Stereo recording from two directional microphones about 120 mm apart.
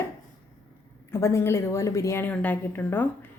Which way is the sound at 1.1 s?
25° left (ahead or behind).